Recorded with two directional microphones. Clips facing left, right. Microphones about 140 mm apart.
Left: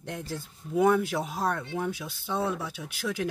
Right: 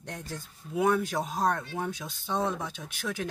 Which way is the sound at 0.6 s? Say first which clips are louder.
Left 5 dB; 20° left (ahead or behind).